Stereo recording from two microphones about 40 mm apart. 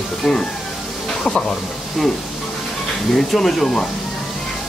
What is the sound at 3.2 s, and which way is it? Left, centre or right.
Speech, centre.